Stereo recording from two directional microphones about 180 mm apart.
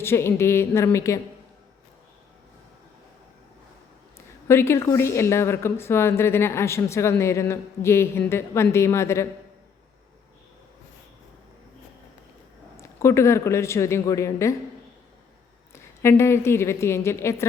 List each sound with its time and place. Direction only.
0.0 s a woman's voice: 15° left (ahead or behind)
4.4 s a woman's voice: 15° left (ahead or behind)
12.7 s a woman's voice: 15° left (ahead or behind)
15.7 s a woman's voice: 15° left (ahead or behind)